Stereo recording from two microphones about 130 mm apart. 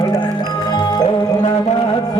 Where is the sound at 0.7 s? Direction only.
30° left (ahead or behind).